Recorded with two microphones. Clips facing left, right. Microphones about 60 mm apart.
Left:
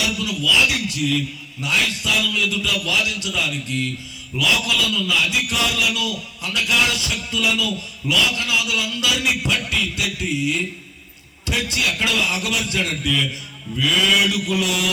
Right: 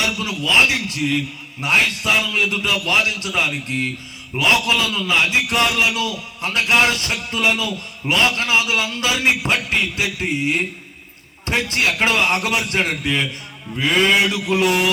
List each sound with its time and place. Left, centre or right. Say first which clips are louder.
0.0 s a man's voice: even; right